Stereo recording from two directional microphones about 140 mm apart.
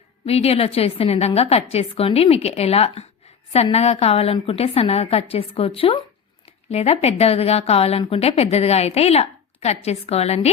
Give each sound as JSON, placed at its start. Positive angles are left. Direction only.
{"t": 0.3, "sound": "speech", "side_deg": 45}